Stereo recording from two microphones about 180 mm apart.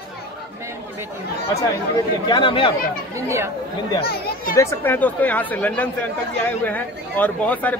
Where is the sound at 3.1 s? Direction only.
15° right (ahead or behind).